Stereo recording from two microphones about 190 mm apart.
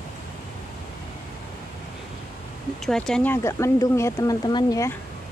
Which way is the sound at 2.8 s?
Centre (ahead or behind).